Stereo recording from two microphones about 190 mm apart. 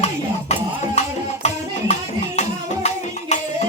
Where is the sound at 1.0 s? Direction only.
35° left (ahead or behind).